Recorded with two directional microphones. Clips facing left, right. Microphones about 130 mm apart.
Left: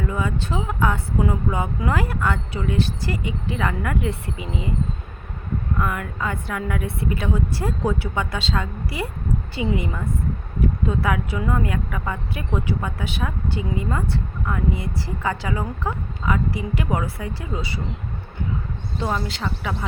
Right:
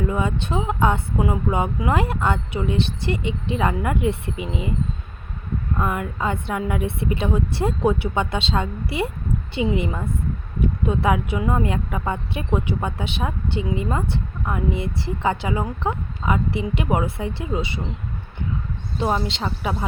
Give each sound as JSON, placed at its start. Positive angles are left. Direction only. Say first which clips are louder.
{"t": 0.1, "sound": "speech", "louder": "right 2 dB", "side_deg": -25}
{"t": 5.7, "sound": "speech", "louder": "right 2 dB", "side_deg": -25}
{"t": 18.9, "sound": "speech", "louder": "right 3 dB", "side_deg": -20}